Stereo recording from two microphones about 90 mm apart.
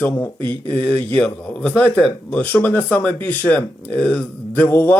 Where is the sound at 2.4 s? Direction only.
20° left (ahead or behind).